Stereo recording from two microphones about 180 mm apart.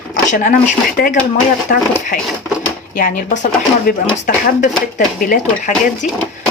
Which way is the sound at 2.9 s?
50° left (ahead or behind).